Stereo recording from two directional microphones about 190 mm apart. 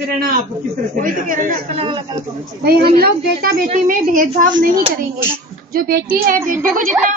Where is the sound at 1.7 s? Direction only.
25° right (ahead or behind).